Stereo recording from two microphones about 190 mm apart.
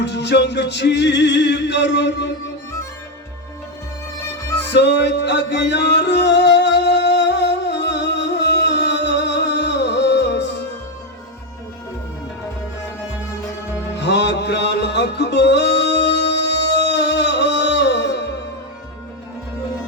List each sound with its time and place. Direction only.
0.0 s male singing: 65° left (ahead or behind)
4.7 s music: 65° left (ahead or behind)
14.0 s music: 65° left (ahead or behind)